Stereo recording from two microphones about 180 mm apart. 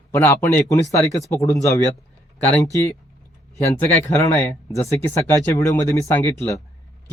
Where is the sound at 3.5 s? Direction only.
15° left (ahead or behind).